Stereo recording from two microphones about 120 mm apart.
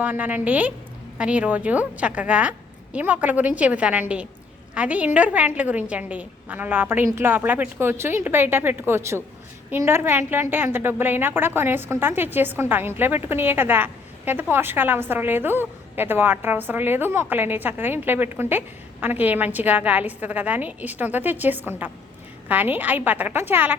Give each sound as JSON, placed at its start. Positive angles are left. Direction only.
{"t": 0.0, "sound": "a woman's voice", "side_deg": -15}